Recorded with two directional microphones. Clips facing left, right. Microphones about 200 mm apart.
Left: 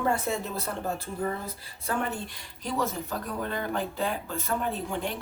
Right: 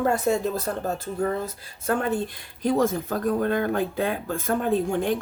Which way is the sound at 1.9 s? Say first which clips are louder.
Right 7 dB; 50° right (ahead or behind).